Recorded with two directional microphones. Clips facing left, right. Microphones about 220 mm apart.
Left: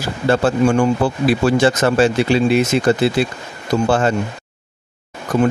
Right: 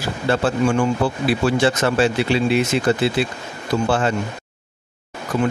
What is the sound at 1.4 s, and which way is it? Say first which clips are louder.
A man's voice: left 3 dB; 45° left (ahead or behind).